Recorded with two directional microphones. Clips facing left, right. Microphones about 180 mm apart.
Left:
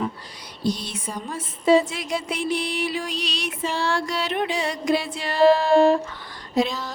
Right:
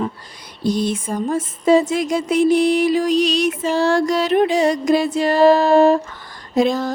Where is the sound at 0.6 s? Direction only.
50° right (ahead or behind).